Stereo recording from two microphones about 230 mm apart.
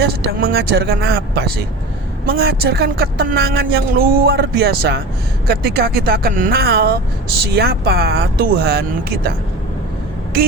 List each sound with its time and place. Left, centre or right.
0.0 s speech: right